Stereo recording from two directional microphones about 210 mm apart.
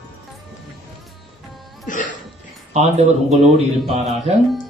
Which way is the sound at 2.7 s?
30° right (ahead or behind).